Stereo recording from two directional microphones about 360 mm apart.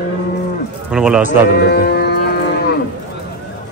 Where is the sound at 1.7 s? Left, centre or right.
Left.